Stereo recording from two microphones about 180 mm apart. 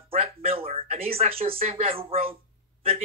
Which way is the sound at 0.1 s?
35° right (ahead or behind).